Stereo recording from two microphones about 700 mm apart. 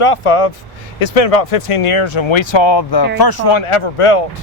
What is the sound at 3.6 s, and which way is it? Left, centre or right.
Speech, left.